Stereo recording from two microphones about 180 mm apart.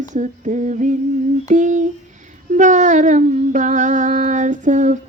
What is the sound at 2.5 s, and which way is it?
Humming, 45° right (ahead or behind).